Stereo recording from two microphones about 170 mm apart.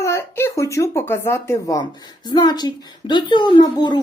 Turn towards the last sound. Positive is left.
turn(degrees=25)  # may be behind; listen again after turning